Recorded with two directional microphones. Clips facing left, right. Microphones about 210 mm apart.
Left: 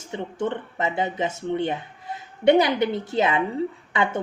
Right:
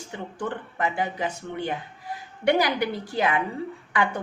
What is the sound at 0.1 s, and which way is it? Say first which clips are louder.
A woman's voice: left 5 dB; 25° left (ahead or behind).